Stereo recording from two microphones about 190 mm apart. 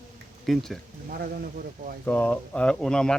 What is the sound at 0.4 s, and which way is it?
Speech, centre (ahead or behind).